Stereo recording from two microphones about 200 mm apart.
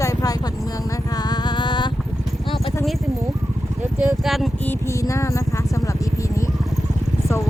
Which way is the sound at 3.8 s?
5° right (ahead or behind).